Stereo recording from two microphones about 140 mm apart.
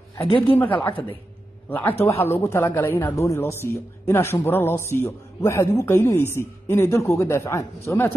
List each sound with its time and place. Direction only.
0.6 s a woman's voice: 15° left (ahead or behind)